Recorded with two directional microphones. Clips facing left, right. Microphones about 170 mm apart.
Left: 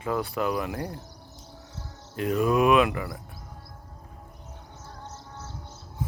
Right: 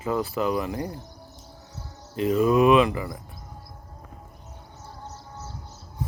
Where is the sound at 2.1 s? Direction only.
Centre (ahead or behind).